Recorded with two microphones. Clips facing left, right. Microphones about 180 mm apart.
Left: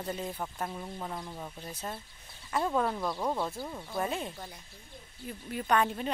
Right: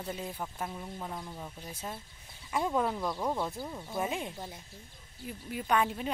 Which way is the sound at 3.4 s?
15° right (ahead or behind).